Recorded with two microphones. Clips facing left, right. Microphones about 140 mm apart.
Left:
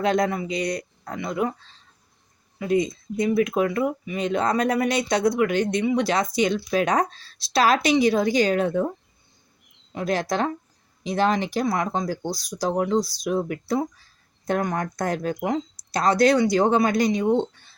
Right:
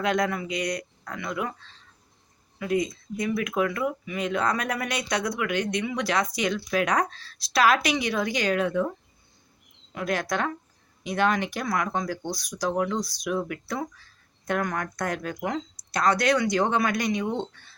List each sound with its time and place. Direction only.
0.0 s speech: 30° left (ahead or behind)
2.6 s speech: 25° left (ahead or behind)
9.9 s speech: 30° left (ahead or behind)